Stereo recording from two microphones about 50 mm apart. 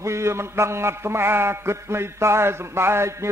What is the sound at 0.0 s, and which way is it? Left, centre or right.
A man's voice, right.